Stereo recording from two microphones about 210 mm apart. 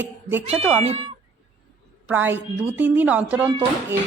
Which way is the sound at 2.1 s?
10° right (ahead or behind).